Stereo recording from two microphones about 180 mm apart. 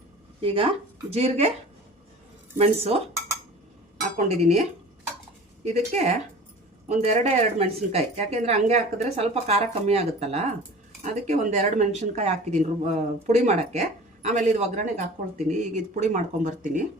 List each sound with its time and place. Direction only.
0.4 s a woman's voice: 30° right (ahead or behind)
2.6 s a woman's voice: 35° right (ahead or behind)
4.2 s a woman's voice: 40° right (ahead or behind)
5.6 s a woman's voice: 40° right (ahead or behind)